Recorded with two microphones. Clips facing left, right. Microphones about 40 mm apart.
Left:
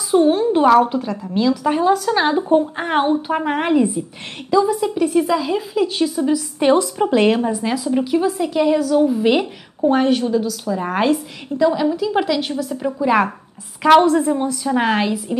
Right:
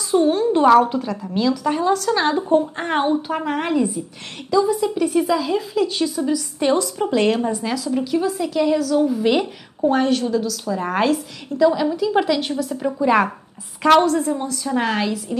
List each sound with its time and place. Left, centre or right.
0.1 s a woman's voice: centre
14.0 s a woman's voice: left